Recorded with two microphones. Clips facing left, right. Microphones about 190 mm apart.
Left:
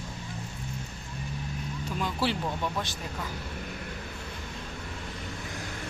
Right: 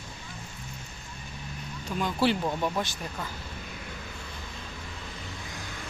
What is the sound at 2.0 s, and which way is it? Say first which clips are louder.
Speech: right 4 dB; centre (ahead or behind).